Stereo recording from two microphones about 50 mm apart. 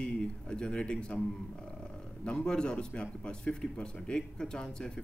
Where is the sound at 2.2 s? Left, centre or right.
Centre.